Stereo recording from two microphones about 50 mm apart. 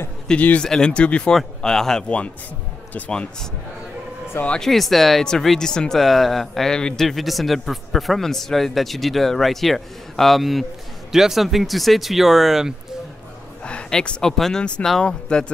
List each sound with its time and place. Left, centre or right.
0.6 s speech: centre
1.3 s speech: centre
2.0 s speech: left
4.6 s a man's voice: centre
5.9 s a man's voice: centre
6.7 s speech: centre
7.1 s a man's voice: centre
13.7 s speech: centre